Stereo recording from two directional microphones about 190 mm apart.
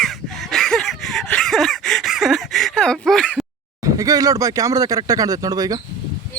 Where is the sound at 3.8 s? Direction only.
20° right (ahead or behind).